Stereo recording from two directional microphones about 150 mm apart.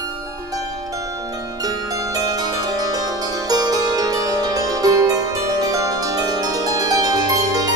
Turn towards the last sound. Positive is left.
turn(degrees=-25)  # may be behind; listen again after turning